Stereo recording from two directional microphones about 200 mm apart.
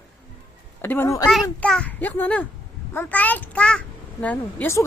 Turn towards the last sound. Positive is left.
turn(degrees=10)  # may be behind; listen again after turning